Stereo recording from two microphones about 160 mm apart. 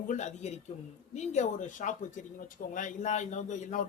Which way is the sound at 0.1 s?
45° left (ahead or behind).